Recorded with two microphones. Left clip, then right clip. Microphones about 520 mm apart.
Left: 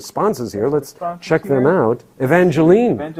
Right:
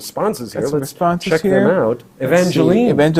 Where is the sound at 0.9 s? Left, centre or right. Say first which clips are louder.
Right 8 dB; right.